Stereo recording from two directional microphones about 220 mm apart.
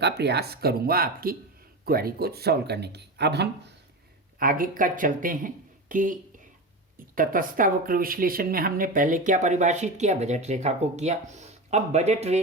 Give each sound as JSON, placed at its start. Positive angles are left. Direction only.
{"t": 0.0, "sound": "speech", "side_deg": -50}
{"t": 7.2, "sound": "speech", "side_deg": -40}